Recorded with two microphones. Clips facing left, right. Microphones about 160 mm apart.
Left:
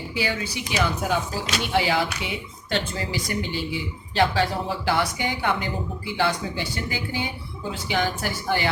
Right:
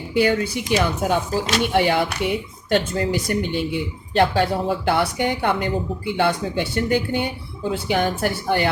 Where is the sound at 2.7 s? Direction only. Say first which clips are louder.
Right 7 dB; 50° right (ahead or behind).